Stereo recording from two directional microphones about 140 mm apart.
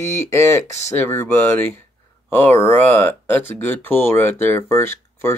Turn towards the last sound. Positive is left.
turn(degrees=15)  # may be behind; listen again after turning